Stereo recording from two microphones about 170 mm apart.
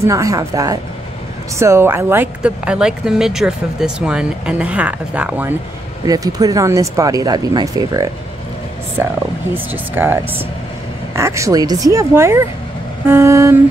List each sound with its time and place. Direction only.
0.0 s a woman's voice: 20° right (ahead or behind)
6.0 s speech: 20° right (ahead or behind)